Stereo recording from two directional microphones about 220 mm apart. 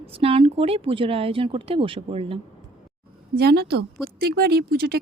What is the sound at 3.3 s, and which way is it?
Speech, 45° right (ahead or behind).